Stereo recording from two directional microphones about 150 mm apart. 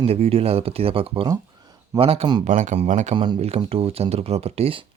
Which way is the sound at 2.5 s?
55° right (ahead or behind).